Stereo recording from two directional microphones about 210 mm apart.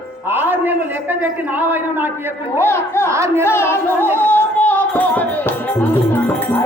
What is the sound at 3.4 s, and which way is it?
Music, 10° left (ahead or behind).